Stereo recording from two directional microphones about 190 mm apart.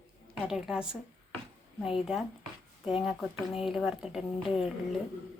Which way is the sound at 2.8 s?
Centre (ahead or behind).